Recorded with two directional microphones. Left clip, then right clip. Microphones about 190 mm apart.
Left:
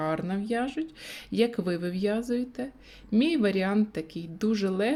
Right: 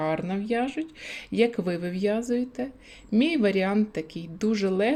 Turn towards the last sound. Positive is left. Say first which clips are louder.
# right 3 dB
turn(degrees=5)  # may be behind; listen again after turning